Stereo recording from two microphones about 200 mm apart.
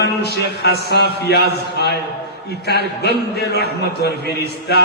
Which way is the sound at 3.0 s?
55° left (ahead or behind).